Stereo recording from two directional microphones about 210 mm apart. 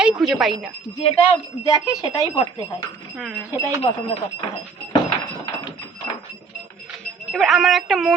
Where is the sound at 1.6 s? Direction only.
15° left (ahead or behind).